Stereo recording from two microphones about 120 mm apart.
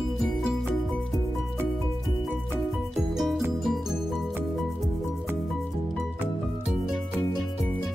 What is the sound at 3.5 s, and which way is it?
Music, centre (ahead or behind).